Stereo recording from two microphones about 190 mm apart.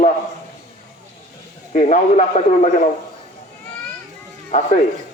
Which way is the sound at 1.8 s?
40° left (ahead or behind).